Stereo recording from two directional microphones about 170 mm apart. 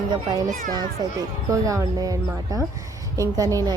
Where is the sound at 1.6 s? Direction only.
20° right (ahead or behind).